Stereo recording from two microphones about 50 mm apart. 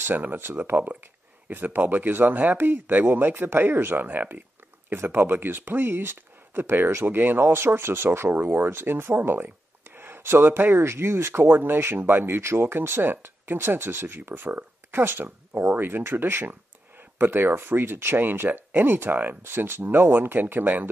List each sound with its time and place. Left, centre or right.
0.0 s speech: right
8.3 s speech: right
11.4 s speech: right
12.4 s speech: right